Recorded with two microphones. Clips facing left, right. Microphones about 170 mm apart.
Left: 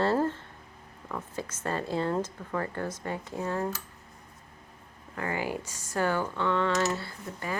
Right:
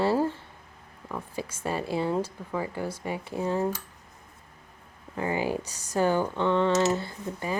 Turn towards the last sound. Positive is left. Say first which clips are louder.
# right 4 dB
turn(degrees=-20)  # may be behind; listen again after turning